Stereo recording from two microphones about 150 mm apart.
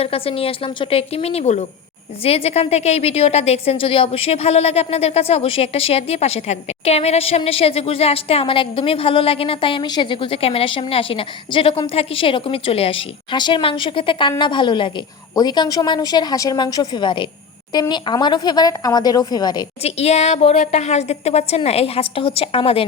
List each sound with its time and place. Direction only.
0.0 s a woman's voice: 40° left (ahead or behind)
19.8 s a woman's voice: 45° left (ahead or behind)